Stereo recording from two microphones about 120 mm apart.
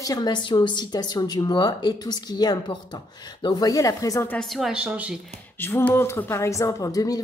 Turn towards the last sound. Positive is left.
turn(degrees=30)  # may be behind; listen again after turning